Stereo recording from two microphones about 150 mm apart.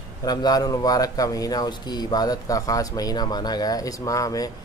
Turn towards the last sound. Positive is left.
turn(degrees=25)  # may be behind; listen again after turning